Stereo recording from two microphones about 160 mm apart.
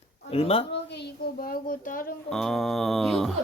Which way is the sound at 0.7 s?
90° left.